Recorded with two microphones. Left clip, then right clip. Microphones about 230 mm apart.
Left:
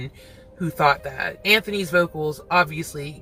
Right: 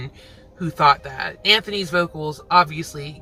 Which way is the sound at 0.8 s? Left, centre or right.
Centre.